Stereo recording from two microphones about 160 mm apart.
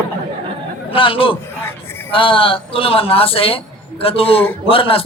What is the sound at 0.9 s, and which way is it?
A man's voice, 35° left (ahead or behind).